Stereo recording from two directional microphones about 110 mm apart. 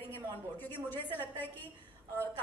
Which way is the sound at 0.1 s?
15° left (ahead or behind).